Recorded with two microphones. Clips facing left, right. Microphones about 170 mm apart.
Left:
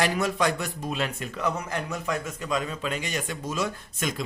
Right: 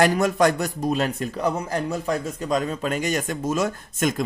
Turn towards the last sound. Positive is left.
turn(degrees=-50)  # may be behind; listen again after turning